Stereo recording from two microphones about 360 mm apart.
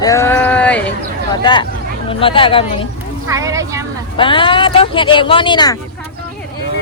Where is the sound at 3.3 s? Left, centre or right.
Centre.